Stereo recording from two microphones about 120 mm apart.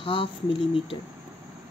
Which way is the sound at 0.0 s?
45° left (ahead or behind).